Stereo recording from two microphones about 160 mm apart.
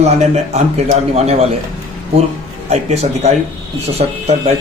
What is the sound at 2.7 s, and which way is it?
Speech, 45° right (ahead or behind).